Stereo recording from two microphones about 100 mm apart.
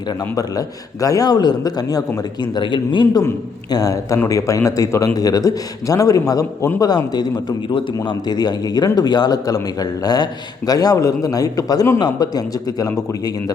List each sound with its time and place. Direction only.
1.0 s a man's voice: 35° left (ahead or behind)
2.6 s speech: 50° left (ahead or behind)
3.1 s a man's voice: 35° left (ahead or behind)
8.3 s a man's voice: 45° left (ahead or behind)